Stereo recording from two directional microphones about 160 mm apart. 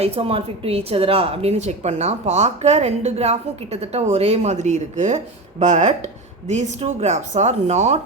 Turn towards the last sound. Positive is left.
turn(degrees=-45)  # may be behind; listen again after turning